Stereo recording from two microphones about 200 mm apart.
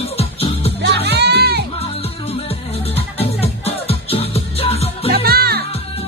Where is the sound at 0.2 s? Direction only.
30° left (ahead or behind).